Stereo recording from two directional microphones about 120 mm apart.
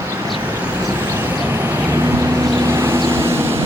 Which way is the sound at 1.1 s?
20° right (ahead or behind).